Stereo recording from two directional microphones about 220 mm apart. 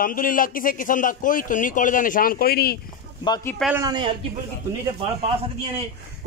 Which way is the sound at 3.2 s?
20° left (ahead or behind).